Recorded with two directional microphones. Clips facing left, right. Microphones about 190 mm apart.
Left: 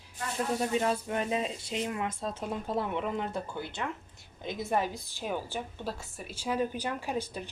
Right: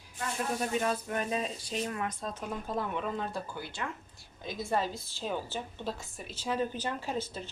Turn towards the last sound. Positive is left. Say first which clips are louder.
# left 1 dB
turn(degrees=15)  # may be behind; listen again after turning